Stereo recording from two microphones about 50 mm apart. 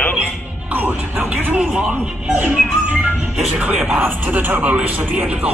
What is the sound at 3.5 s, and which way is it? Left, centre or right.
Speech, right.